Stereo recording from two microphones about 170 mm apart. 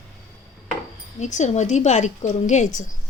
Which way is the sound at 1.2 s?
45° left (ahead or behind).